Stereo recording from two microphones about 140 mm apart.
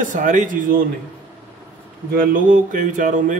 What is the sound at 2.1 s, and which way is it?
A man's voice, 90° right.